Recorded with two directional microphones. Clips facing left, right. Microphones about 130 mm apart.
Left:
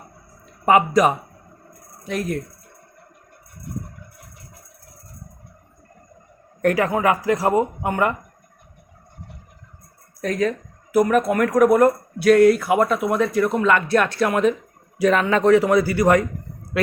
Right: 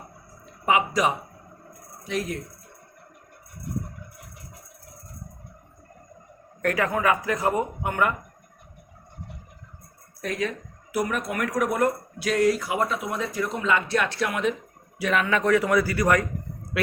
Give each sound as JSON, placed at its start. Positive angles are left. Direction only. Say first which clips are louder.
{"t": 0.6, "sound": "speech", "louder": "left 6 dB", "side_deg": 50}
{"t": 6.6, "sound": "speech", "louder": "left 5 dB", "side_deg": 25}
{"t": 10.2, "sound": "speech", "louder": "left 7 dB", "side_deg": 40}
{"t": 16.8, "sound": "a man's voice", "louder": "left 5 dB", "side_deg": 40}